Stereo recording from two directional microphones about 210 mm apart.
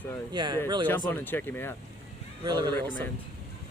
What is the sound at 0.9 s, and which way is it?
Speech, 10° left (ahead or behind).